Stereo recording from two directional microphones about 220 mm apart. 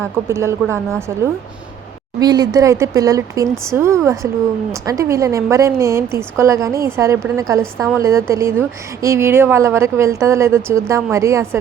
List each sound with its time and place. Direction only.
0.0 s a woman's voice: 15° right (ahead or behind)
2.1 s a woman's voice: 20° right (ahead or behind)